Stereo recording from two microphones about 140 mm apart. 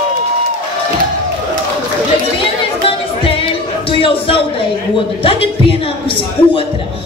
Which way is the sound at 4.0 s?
40° left (ahead or behind).